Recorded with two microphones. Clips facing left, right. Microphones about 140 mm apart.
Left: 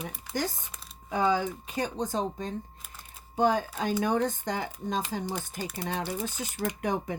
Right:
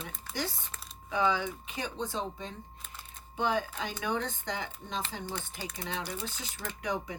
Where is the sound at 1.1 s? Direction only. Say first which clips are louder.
Left 3 dB; 40° left (ahead or behind).